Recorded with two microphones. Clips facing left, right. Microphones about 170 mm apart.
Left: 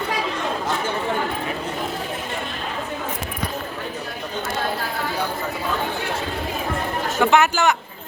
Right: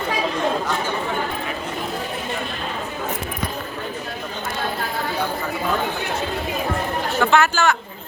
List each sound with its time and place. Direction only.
7.2 s speech: 15° left (ahead or behind)